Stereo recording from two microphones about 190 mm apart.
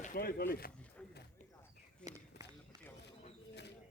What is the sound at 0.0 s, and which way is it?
Speech, 50° left (ahead or behind).